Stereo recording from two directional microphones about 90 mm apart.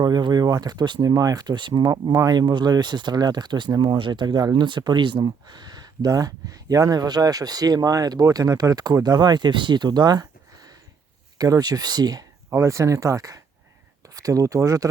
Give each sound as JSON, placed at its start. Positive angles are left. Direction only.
{"t": 0.0, "sound": "speech", "side_deg": -50}
{"t": 12.5, "sound": "speech", "side_deg": -35}